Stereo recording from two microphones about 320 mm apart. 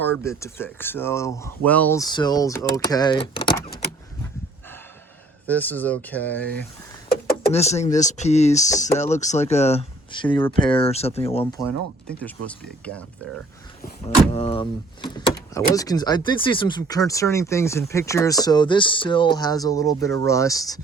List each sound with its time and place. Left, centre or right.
0.0 s speech: centre
5.5 s speech: centre
7.1 s speech: left
12.0 s speech: centre
13.8 s speech: left